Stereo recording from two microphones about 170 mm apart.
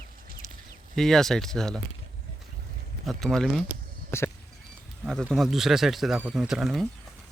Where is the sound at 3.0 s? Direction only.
Centre (ahead or behind).